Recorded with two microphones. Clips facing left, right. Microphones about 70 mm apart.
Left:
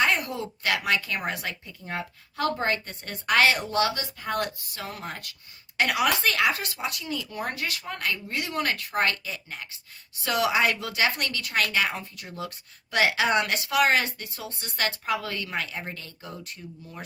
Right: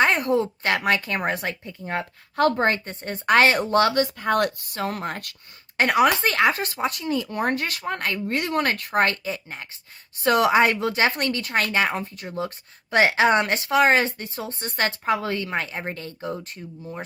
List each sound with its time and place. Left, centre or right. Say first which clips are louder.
0.0 s a woman's voice: right 6 dB; right
5.7 s a woman's voice: right 5 dB; right